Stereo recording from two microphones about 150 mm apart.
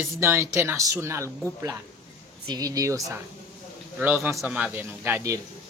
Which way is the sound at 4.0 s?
15° right (ahead or behind).